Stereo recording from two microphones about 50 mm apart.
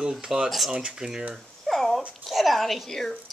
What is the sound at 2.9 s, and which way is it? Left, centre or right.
Speech, centre.